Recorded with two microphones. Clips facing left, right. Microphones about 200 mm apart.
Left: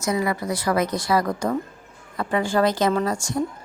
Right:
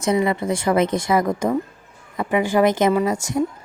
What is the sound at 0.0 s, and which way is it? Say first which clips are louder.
A woman's voice: right 4 dB; 25° right (ahead or behind).